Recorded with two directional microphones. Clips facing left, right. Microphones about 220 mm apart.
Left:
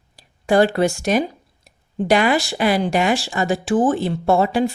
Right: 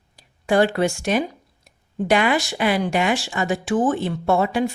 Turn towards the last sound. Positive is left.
turn(degrees=35)  # may be behind; listen again after turning